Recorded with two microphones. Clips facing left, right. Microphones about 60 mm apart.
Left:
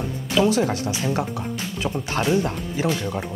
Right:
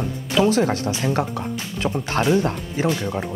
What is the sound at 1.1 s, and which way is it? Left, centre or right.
Music, right.